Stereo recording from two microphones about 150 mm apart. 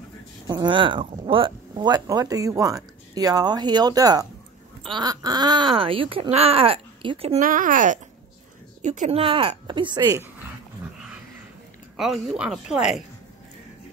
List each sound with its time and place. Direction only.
0.5 s speech: 30° right (ahead or behind)
7.3 s speech: 65° right (ahead or behind)
8.8 s speech: 50° right (ahead or behind); by 10.2 s 25° right (ahead or behind)
12.0 s speech: centre (ahead or behind)